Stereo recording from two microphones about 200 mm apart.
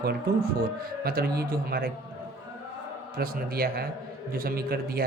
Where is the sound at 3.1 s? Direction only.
50° right (ahead or behind).